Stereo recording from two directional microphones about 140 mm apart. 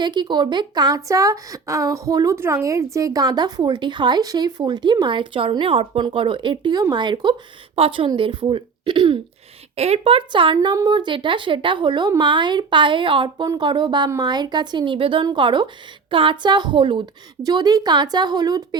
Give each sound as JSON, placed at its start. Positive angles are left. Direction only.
{"t": 0.0, "sound": "a woman's voice", "side_deg": -30}
{"t": 9.7, "sound": "a woman's voice", "side_deg": -50}